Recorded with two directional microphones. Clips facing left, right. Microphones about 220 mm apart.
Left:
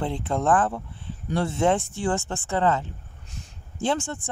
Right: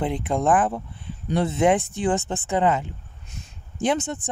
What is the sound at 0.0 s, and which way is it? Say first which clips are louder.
Speech: right 2 dB; 15° right (ahead or behind).